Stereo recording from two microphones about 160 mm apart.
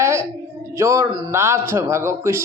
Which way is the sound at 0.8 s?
15° right (ahead or behind).